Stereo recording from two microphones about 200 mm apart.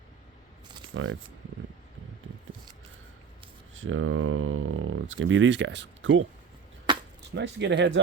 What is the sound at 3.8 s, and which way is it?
Speech, 80° right.